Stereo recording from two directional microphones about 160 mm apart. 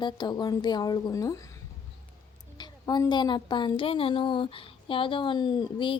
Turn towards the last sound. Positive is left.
turn(degrees=30)  # may be behind; listen again after turning